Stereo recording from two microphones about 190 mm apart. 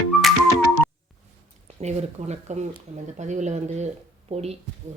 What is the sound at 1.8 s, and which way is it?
Speech, 35° right (ahead or behind).